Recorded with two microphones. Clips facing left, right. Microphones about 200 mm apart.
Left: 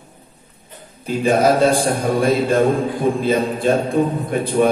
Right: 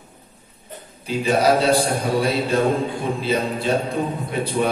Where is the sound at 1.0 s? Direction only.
50° left (ahead or behind).